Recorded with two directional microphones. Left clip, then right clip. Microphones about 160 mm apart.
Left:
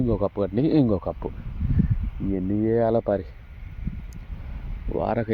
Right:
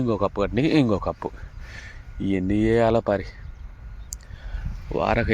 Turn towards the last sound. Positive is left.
turn(degrees=10)  # may be behind; listen again after turning